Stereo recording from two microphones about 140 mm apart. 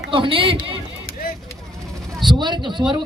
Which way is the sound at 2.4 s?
35° right (ahead or behind).